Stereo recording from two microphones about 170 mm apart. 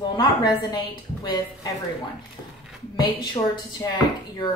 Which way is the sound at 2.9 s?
25° left (ahead or behind).